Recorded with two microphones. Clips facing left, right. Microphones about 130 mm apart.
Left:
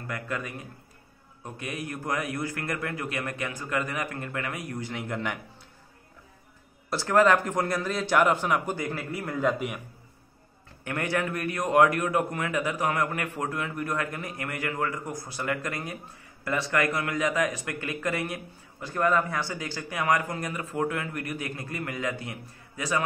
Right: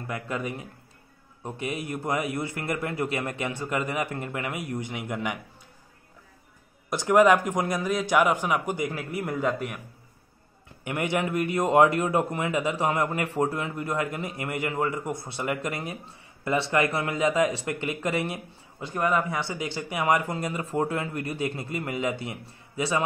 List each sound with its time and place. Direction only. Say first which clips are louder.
0.0 s a man's voice: right 2 dB; 20° right (ahead or behind)
6.9 s a man's voice: right 2 dB; 15° right (ahead or behind)
9.4 s a man's voice: left 3 dB; 5° left (ahead or behind)
10.8 s a man's voice: right 2 dB; 15° right (ahead or behind)